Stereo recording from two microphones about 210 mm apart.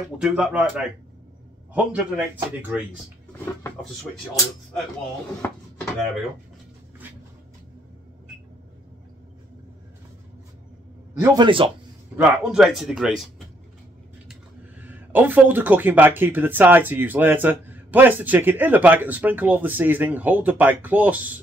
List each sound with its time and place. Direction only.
0.2 s speech: 5° right (ahead or behind)
5.4 s speech: 10° left (ahead or behind)
11.1 s speech: 20° right (ahead or behind)
12.2 s speech: 5° right (ahead or behind)
14.8 s speech: 10° right (ahead or behind)